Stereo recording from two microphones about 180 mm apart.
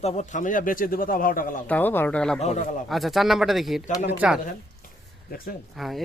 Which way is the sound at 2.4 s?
40° left (ahead or behind).